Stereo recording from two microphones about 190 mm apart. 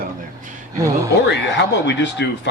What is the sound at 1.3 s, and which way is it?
Speech, 65° left (ahead or behind).